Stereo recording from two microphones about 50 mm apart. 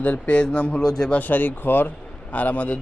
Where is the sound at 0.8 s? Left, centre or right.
Centre.